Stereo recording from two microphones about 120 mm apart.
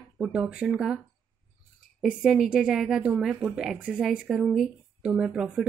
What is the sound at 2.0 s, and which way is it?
Speech, 5° right (ahead or behind).